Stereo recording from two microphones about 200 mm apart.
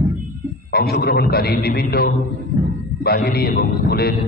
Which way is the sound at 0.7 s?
50° left (ahead or behind).